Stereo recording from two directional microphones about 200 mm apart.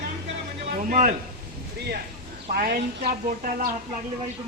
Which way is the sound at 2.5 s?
55° right (ahead or behind).